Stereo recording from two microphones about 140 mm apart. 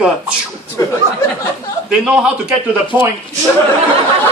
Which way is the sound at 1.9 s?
5° right (ahead or behind).